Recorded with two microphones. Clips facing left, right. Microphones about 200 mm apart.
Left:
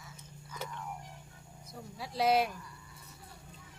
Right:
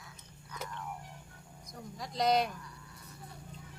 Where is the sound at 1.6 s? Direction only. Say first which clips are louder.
Even; 5° left (ahead or behind).